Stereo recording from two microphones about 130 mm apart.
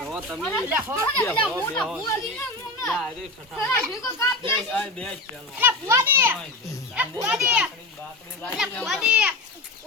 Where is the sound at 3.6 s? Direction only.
15° left (ahead or behind).